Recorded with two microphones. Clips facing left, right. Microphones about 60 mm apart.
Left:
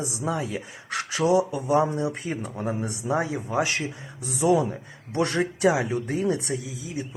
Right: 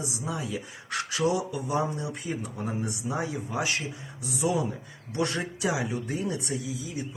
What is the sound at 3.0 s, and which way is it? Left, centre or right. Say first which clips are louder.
Speech: left 9 dB; left.